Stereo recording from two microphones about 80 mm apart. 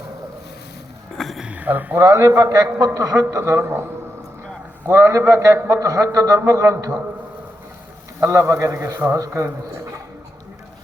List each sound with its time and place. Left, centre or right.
1.1 s music: centre
1.4 s a sound: centre
2.0 s a man's voice: right
2.4 s a man's voice: right
4.9 s a man's voice: right
8.2 s a man's voice: right